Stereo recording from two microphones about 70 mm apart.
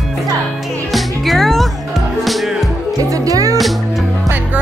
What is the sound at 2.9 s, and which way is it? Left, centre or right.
Music, right.